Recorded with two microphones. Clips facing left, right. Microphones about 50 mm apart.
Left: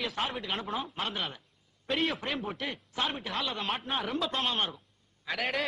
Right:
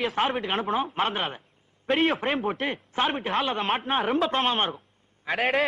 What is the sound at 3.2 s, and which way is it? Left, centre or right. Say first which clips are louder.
A man's voice: right 8 dB; right.